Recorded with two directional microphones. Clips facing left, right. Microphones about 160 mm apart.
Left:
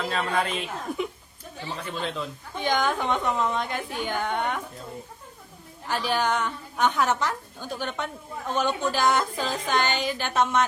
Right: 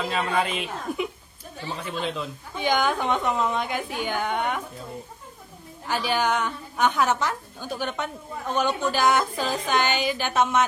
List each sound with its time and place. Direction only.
0.0 s a woman's voice: 10° right (ahead or behind)
5.9 s a woman's voice: 5° right (ahead or behind)